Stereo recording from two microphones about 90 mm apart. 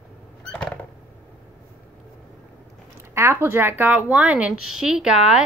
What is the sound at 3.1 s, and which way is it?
Speech, 30° right (ahead or behind).